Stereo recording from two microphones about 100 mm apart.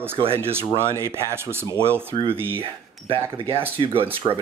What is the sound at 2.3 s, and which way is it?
Speech, 20° right (ahead or behind).